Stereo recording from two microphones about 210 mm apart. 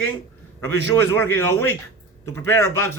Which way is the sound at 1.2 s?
10° left (ahead or behind).